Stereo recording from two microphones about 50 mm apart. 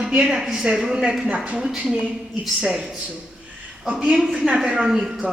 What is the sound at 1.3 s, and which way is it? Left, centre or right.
Speech, right.